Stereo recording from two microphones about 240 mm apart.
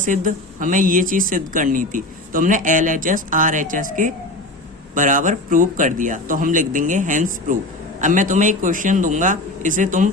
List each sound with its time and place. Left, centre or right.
0.0 s speech: right